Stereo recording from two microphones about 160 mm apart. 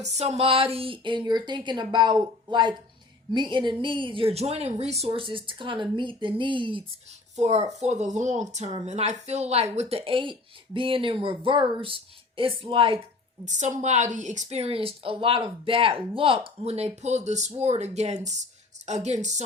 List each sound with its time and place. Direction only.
0.0 s speech: 45° right (ahead or behind)
7.3 s speech: 45° right (ahead or behind)
13.4 s speech: 50° right (ahead or behind)